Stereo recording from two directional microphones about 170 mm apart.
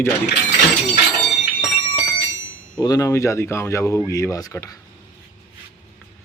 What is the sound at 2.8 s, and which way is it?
Speech, 20° left (ahead or behind).